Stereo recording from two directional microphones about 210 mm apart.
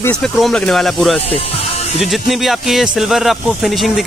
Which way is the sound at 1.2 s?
30° left (ahead or behind).